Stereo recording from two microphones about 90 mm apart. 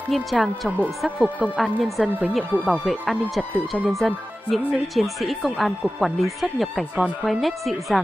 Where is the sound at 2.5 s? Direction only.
15° right (ahead or behind).